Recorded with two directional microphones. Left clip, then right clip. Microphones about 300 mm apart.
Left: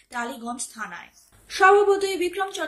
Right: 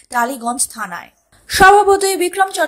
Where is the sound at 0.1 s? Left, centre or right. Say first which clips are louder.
Right 13 dB; right.